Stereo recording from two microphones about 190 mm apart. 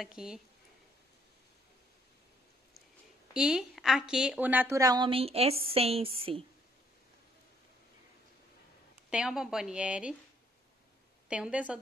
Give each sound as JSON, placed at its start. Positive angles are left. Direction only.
{"t": 0.0, "sound": "a woman's voice", "side_deg": -5}
{"t": 3.3, "sound": "a woman's voice", "side_deg": -5}
{"t": 9.1, "sound": "a woman's voice", "side_deg": -5}
{"t": 11.2, "sound": "a woman's voice", "side_deg": -5}